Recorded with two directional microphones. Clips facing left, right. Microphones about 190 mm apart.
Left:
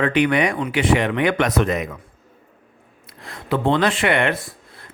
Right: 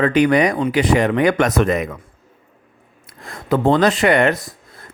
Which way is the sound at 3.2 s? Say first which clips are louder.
Right 4 dB; 45° right (ahead or behind).